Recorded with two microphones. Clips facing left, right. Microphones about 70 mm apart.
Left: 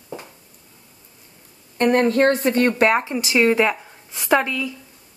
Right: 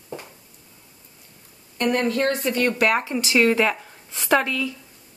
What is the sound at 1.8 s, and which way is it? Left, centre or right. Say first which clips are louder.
Speech: left 5 dB; left.